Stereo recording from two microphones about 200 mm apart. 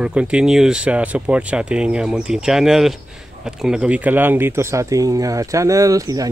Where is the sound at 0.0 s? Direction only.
5° right (ahead or behind).